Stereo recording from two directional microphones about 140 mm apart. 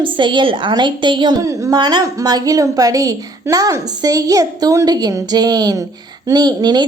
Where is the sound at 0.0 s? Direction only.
35° right (ahead or behind).